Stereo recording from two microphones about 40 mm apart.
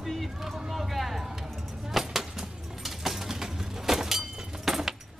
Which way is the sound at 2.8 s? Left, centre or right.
Centre.